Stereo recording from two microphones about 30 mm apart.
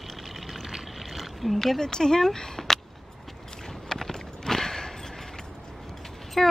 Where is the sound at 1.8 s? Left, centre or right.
Centre.